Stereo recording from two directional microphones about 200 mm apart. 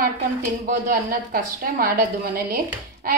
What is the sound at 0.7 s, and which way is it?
A woman's voice, 45° right (ahead or behind).